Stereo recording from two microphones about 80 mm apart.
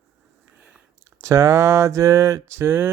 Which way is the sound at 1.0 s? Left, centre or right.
Right.